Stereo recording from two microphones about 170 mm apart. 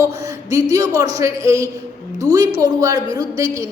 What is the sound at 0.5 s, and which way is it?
A man's voice, 20° right (ahead or behind).